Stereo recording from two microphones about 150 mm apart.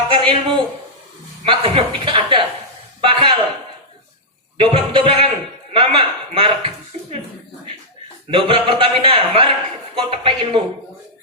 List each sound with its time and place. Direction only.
0.1 s a sound: 35° right (ahead or behind)
1.5 s a man's voice: 35° right (ahead or behind)
4.5 s a man's voice: 35° right (ahead or behind)
8.3 s a man's voice: 35° right (ahead or behind)